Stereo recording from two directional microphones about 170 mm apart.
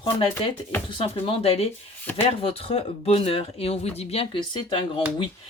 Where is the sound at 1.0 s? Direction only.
30° left (ahead or behind).